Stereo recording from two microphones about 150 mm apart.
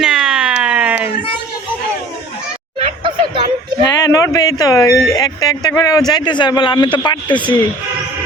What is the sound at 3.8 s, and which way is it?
A man's voice, 25° left (ahead or behind).